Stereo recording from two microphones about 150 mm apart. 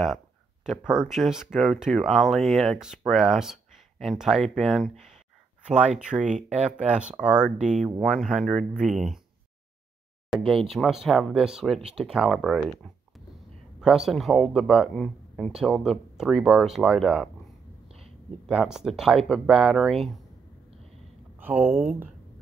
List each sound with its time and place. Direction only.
0.7 s speech: 5° right (ahead or behind)
4.9 s a sound: centre (ahead or behind)
5.9 s speech: 5° right (ahead or behind)
6.2 s speech: 55° right (ahead or behind)
6.8 s speech: 5° right (ahead or behind)
10.3 s speech: centre (ahead or behind)
17.8 s a sound: 40° right (ahead or behind)
18.5 s speech: 5° right (ahead or behind)
21.4 s speech: 10° right (ahead or behind)